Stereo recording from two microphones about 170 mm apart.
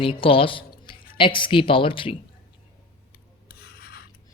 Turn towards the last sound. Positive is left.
turn(degrees=65)  # may be behind; listen again after turning